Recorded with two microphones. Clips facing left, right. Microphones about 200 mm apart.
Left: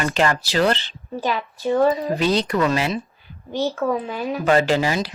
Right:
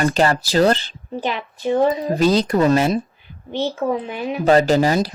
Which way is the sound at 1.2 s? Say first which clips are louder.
Even; 20° right (ahead or behind).